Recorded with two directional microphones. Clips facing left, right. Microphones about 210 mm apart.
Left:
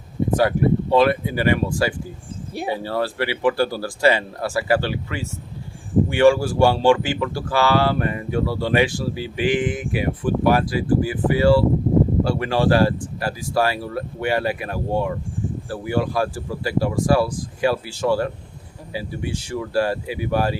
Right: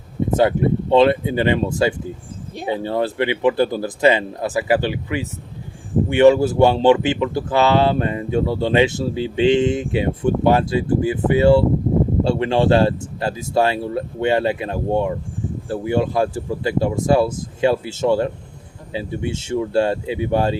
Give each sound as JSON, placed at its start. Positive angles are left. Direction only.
{"t": 0.3, "sound": "speech", "side_deg": -25}